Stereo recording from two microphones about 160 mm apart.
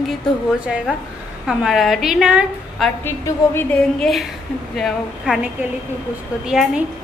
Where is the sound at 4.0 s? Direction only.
Centre (ahead or behind).